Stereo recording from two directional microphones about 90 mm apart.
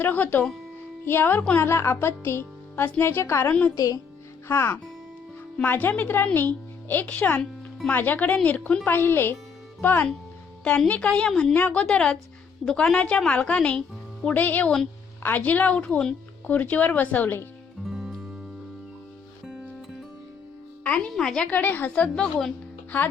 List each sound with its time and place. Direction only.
0.0 s speech: 20° left (ahead or behind)
3.8 s speech: 40° left (ahead or behind)
4.4 s speech: 25° left (ahead or behind)
10.6 s speech: 10° left (ahead or behind)
17.8 s music: 5° right (ahead or behind)
21.1 s a woman's voice: centre (ahead or behind)
21.5 s speech: 20° left (ahead or behind)